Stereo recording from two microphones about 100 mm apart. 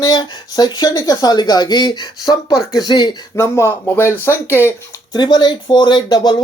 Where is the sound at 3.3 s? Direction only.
30° left (ahead or behind).